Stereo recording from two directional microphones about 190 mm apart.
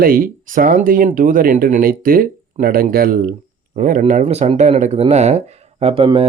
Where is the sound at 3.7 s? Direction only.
40° right (ahead or behind).